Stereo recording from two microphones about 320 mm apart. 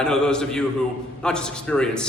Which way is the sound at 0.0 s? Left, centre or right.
Centre.